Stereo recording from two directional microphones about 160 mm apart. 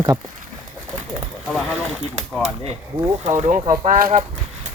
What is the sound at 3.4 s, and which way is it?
Speech, 50° right (ahead or behind).